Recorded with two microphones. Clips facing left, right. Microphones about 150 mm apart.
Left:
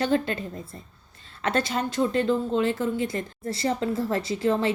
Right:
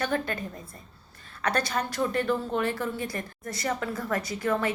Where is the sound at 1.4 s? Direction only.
25° left (ahead or behind).